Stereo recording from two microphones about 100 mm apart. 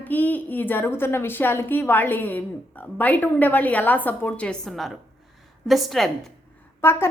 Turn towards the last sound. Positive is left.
turn(degrees=25)  # may be behind; listen again after turning